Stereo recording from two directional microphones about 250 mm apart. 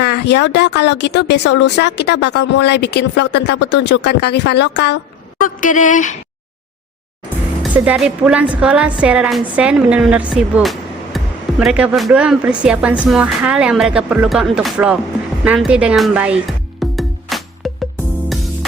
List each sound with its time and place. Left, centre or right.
0.0 s speech: left
5.4 s a sound: left
7.6 s a woman's voice: centre
15.4 s music: centre